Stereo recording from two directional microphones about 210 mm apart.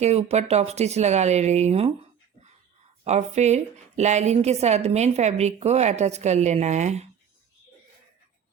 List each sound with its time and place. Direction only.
0.0 s a woman's voice: 30° right (ahead or behind)
3.0 s a woman's voice: 30° right (ahead or behind)